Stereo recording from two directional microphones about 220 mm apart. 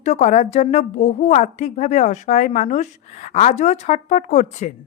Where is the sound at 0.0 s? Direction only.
30° left (ahead or behind).